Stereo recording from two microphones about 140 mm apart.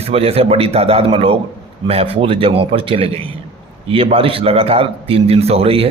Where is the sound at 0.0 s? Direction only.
45° right (ahead or behind).